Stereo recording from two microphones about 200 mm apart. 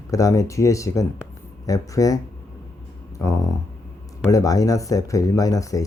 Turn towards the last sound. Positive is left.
turn(degrees=15)  # may be behind; listen again after turning